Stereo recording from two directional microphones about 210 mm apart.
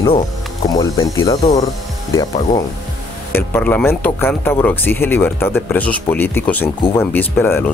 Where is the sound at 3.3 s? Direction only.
10° left (ahead or behind).